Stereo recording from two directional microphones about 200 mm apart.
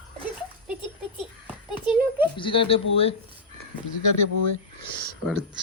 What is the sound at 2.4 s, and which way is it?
Speech, 25° left (ahead or behind).